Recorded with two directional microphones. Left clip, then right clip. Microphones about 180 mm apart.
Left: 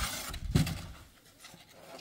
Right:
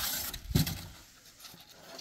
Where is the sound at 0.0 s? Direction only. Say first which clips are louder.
Right 1 dB; centre (ahead or behind).